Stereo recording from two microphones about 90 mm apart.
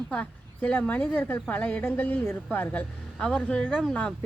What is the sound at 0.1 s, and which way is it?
Speech, 15° left (ahead or behind).